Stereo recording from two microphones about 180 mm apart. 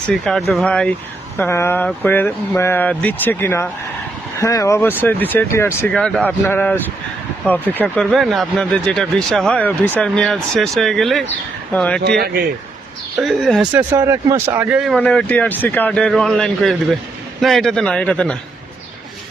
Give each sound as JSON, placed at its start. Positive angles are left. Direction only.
{"t": 0.1, "sound": "speech", "side_deg": 0}
{"t": 12.0, "sound": "speech", "side_deg": -65}
{"t": 13.1, "sound": "speech", "side_deg": 0}
{"t": 13.9, "sound": "speech", "side_deg": -15}